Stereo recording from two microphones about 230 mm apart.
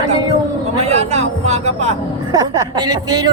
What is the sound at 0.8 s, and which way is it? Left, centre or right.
Speech, right.